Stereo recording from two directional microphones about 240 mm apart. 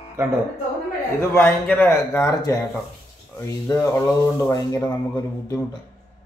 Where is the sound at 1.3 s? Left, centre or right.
Centre.